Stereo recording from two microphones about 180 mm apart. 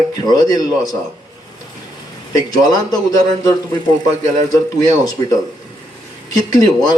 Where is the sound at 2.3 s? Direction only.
20° left (ahead or behind).